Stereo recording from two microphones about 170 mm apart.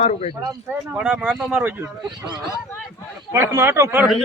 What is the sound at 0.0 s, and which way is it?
Speech, 40° left (ahead or behind).